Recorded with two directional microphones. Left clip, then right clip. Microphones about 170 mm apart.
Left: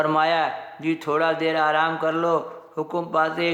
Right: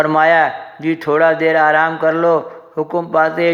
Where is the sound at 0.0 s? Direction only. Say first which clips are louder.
Right 9 dB; 20° right (ahead or behind).